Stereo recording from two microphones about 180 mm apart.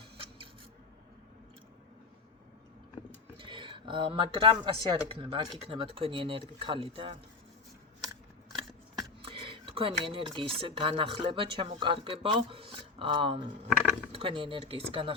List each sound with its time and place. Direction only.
3.3 s speech: 25° right (ahead or behind)
9.0 s a sound: 30° right (ahead or behind)
10.1 s speech: 30° right (ahead or behind)